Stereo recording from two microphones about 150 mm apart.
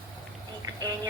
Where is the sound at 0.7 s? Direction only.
25° right (ahead or behind).